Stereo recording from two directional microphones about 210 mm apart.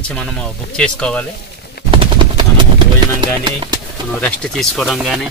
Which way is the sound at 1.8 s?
25° right (ahead or behind).